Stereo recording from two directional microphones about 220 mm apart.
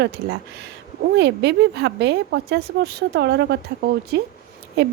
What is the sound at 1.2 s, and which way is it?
Speech, 50° right (ahead or behind).